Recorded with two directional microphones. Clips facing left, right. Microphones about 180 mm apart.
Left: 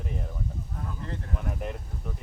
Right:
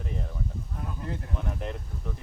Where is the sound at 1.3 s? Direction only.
5° left (ahead or behind).